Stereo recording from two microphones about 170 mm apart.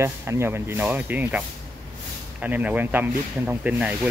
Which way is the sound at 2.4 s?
10° right (ahead or behind).